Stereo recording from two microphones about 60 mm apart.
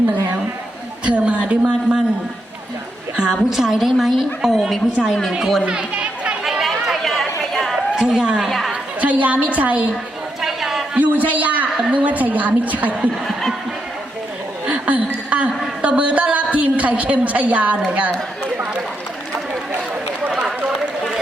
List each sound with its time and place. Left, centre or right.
1.0 s a sound: right
3.2 s a woman's voice: centre
5.6 s chatter: centre
6.4 s chatter: centre
7.9 s a woman's voice: centre
8.4 s a woman's voice: centre
9.0 s a woman's voice: right
10.4 s chatter: centre
10.9 s a woman's voice: right
14.7 s a sound: right
15.8 s a woman's voice: right